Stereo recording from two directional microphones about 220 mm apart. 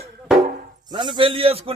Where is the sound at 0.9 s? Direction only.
20° right (ahead or behind).